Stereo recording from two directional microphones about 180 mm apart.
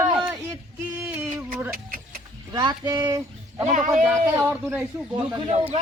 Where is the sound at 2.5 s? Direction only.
25° right (ahead or behind).